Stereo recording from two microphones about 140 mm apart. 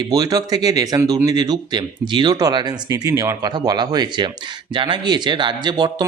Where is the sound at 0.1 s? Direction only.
30° right (ahead or behind).